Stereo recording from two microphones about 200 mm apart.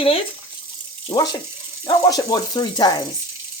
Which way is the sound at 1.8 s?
20° left (ahead or behind).